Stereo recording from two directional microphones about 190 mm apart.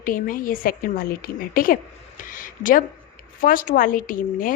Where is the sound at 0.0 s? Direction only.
45° left (ahead or behind).